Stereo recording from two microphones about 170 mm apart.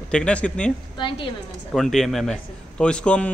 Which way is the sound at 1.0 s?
30° left (ahead or behind).